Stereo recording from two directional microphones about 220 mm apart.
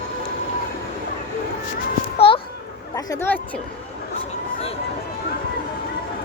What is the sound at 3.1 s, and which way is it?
Speech, 10° left (ahead or behind).